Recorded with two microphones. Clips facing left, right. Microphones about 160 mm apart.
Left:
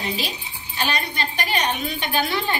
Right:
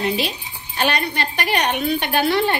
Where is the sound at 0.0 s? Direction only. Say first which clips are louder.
Right 6 dB; 60° right (ahead or behind).